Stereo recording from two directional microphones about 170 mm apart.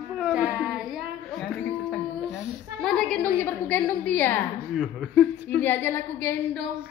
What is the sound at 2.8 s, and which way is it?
A woman's voice, centre (ahead or behind).